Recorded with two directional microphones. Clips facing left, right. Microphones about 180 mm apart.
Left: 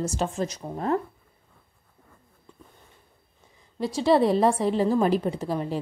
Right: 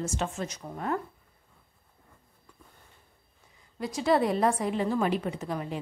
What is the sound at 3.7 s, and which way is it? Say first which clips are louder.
Speech: left 4 dB; 30° left (ahead or behind).